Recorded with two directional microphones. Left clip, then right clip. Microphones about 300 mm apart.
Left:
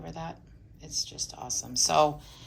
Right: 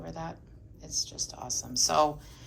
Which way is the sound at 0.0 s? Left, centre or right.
Centre.